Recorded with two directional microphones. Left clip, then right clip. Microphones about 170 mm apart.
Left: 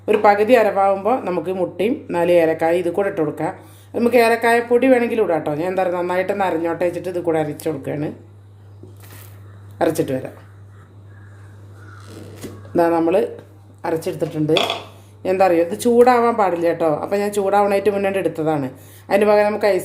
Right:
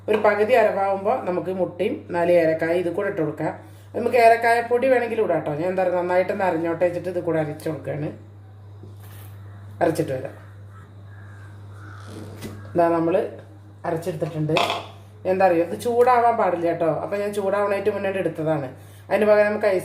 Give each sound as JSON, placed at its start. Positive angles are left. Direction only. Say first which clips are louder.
{"t": 0.0, "sound": "a woman's voice", "louder": "left 5 dB", "side_deg": 55}
{"t": 9.7, "sound": "a woman's voice", "louder": "left 3 dB", "side_deg": 55}
{"t": 12.7, "sound": "speech", "louder": "left 3 dB", "side_deg": 55}
{"t": 13.8, "sound": "speech", "louder": "left 4 dB", "side_deg": 70}